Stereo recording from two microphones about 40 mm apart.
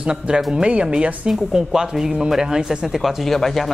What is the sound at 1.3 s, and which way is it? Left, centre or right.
Speech, centre.